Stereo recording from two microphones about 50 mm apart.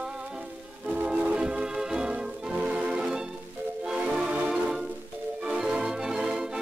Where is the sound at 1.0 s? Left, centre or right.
Centre.